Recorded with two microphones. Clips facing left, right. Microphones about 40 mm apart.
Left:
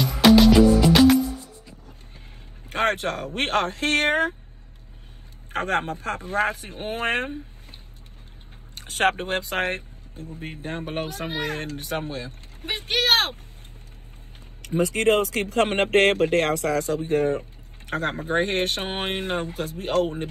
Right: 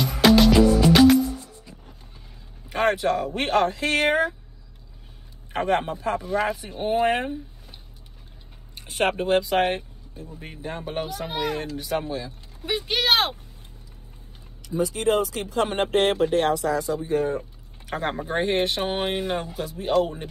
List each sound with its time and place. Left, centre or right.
0.0 s music: centre
2.7 s speech: left
5.5 s speech: left
8.7 s speech: left
14.6 s speech: left